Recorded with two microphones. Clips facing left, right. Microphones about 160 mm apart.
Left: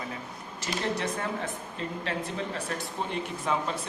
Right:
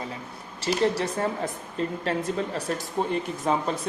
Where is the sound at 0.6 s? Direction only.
35° right (ahead or behind); by 3.1 s 50° right (ahead or behind).